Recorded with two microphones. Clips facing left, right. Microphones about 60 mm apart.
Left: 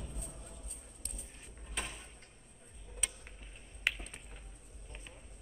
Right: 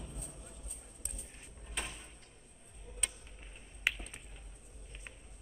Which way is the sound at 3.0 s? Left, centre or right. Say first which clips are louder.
Even; centre.